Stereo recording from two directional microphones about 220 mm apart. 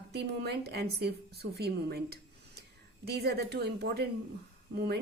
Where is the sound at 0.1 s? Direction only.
50° right (ahead or behind).